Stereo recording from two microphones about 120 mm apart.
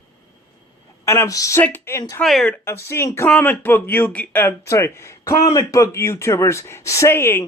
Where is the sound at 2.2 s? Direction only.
5° left (ahead or behind).